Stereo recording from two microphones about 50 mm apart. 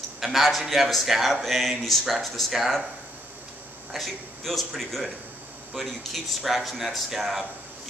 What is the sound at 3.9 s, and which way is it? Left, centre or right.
Speech, centre.